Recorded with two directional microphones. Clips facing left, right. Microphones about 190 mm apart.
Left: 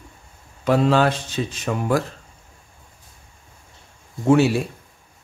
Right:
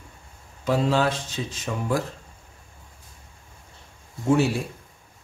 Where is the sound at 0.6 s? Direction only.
65° left (ahead or behind).